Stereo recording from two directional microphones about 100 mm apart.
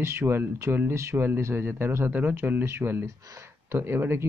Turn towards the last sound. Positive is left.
turn(degrees=-25)  # may be behind; listen again after turning